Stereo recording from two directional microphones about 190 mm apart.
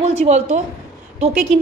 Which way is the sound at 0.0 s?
35° right (ahead or behind).